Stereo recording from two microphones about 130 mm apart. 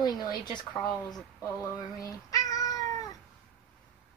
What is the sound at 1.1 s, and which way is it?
Cat, 25° left (ahead or behind).